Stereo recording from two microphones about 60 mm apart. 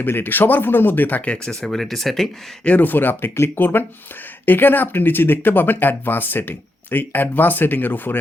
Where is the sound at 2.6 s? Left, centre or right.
Left.